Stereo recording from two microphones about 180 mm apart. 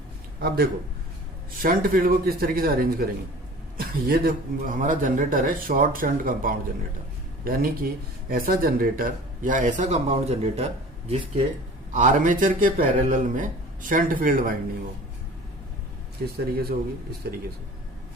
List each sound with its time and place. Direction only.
0.3 s a man's voice: 60° right (ahead or behind); by 10.7 s 35° right (ahead or behind)
11.9 s speech: 45° right (ahead or behind)
16.2 s speech: 60° right (ahead or behind)